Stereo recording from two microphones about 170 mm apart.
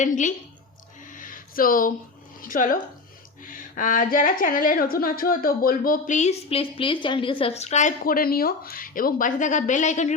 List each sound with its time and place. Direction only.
0.0 s speech: 45° left (ahead or behind)
1.1 s a sound: 55° left (ahead or behind)
2.4 s speech: 55° left (ahead or behind)